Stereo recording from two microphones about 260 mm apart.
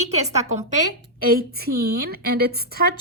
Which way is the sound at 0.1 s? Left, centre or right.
Right.